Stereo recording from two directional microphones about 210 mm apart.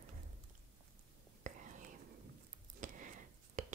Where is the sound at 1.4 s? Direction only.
35° right (ahead or behind).